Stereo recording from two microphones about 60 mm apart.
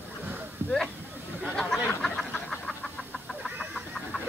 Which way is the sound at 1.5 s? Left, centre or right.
Centre.